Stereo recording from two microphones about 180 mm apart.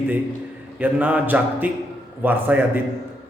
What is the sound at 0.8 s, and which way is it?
A man's voice, 10° right (ahead or behind).